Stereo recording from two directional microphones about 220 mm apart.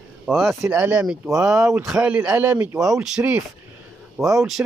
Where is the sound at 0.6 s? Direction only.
10° right (ahead or behind).